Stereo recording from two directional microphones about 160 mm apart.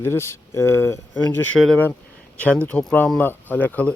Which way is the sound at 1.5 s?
Centre (ahead or behind).